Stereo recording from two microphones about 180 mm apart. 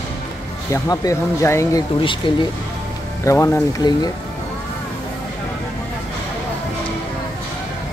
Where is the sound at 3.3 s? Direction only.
15° left (ahead or behind).